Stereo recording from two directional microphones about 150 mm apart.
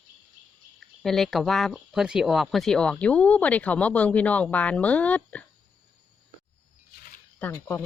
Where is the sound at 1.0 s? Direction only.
Centre (ahead or behind).